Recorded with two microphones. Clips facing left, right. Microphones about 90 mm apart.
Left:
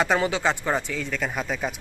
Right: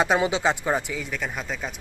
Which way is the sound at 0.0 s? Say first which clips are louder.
Right 1 dB; 20° right (ahead or behind).